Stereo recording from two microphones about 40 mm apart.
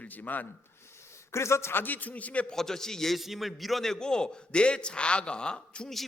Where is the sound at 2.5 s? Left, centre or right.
Centre.